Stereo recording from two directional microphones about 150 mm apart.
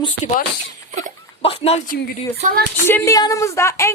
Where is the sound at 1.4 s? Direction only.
40° left (ahead or behind).